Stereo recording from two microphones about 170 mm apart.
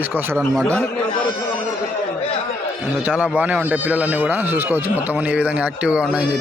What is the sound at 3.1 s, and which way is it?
Speech, 5° right (ahead or behind).